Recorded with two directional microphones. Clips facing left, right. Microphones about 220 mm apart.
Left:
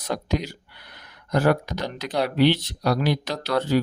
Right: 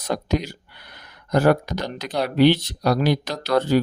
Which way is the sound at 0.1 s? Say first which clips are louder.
Right 3 dB; 45° right (ahead or behind).